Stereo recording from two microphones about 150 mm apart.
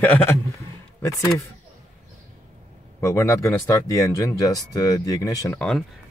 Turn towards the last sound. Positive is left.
turn(degrees=5)  # may be behind; listen again after turning